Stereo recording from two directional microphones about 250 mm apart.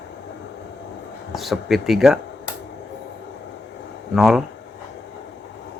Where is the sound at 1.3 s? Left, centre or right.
Centre.